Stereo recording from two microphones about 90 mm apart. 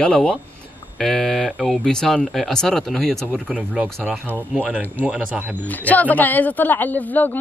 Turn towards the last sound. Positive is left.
turn(degrees=20)  # may be behind; listen again after turning